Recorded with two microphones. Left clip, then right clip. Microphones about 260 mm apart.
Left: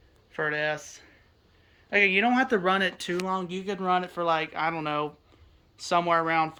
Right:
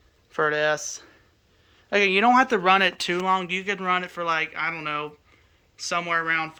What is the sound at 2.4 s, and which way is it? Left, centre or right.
Speech, centre.